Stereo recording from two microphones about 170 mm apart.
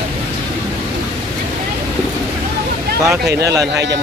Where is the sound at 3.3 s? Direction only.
75° right (ahead or behind).